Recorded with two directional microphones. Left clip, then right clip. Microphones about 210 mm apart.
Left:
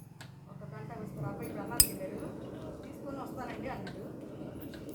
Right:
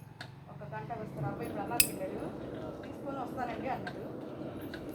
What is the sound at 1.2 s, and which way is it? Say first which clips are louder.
Cutlery: right 3 dB; 35° left (ahead or behind).